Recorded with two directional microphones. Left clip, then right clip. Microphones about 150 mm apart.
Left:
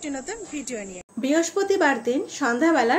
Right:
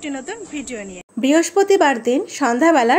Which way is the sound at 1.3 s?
60° right (ahead or behind).